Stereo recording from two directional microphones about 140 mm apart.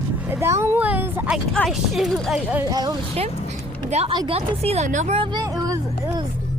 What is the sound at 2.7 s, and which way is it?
Speech, 30° right (ahead or behind).